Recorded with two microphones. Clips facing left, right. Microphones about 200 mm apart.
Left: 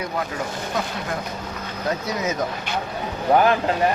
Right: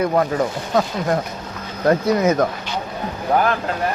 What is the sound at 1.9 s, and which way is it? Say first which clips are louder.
Speech: right 9 dB; 55° right (ahead or behind).